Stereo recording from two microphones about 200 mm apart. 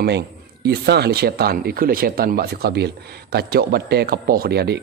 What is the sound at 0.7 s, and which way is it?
Speech, 55° right (ahead or behind).